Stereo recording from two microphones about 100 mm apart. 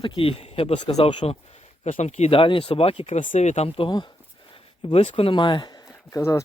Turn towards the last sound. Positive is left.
turn(degrees=30)  # may be behind; listen again after turning